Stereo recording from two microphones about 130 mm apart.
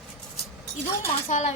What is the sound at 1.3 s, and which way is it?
Speech, 65° left (ahead or behind).